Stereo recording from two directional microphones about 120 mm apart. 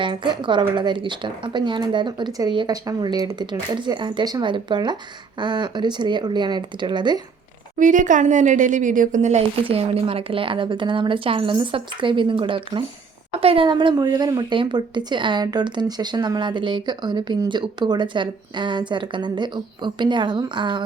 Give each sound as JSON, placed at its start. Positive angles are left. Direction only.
{"t": 0.0, "sound": "speech", "side_deg": -40}
{"t": 7.8, "sound": "a woman's voice", "side_deg": -90}
{"t": 9.6, "sound": "a woman's voice", "side_deg": -50}
{"t": 13.7, "sound": "speech", "side_deg": -40}